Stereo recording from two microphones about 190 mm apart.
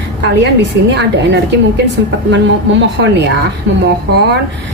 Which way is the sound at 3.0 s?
65° right (ahead or behind).